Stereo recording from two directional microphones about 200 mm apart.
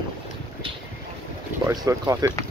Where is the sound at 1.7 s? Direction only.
20° right (ahead or behind).